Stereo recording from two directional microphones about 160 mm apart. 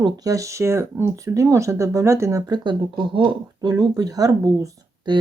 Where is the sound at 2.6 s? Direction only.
30° right (ahead or behind).